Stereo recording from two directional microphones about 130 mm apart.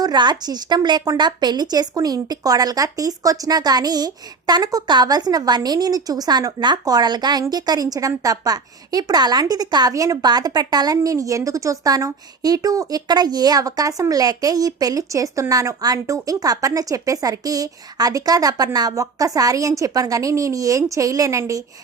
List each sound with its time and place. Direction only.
0.0 s a woman's voice: 35° right (ahead or behind)